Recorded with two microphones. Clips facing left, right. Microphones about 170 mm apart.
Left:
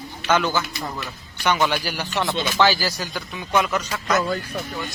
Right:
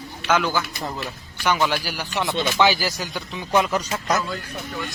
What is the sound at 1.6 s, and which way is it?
Speech, 5° right (ahead or behind).